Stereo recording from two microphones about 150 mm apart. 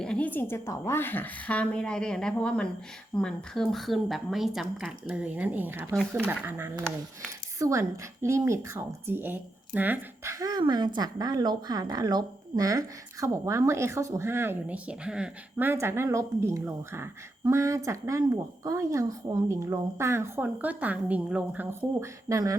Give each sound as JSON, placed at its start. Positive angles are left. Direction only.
{"t": 0.0, "sound": "a woman's voice", "side_deg": 5}